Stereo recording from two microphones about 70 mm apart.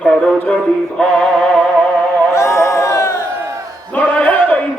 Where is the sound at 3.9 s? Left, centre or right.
Left.